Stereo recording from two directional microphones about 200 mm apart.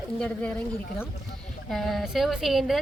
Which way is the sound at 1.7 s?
Centre (ahead or behind).